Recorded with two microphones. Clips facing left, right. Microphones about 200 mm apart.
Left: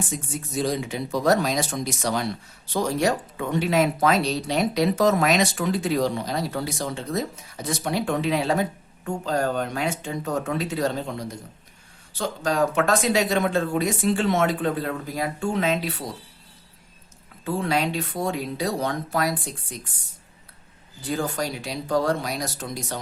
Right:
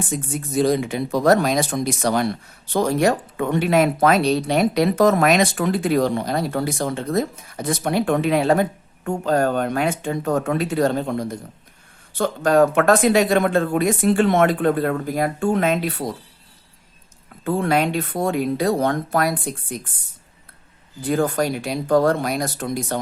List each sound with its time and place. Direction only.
0.1 s speech: 55° right (ahead or behind)
17.4 s speech: 55° right (ahead or behind)
21.0 s speech: 55° right (ahead or behind)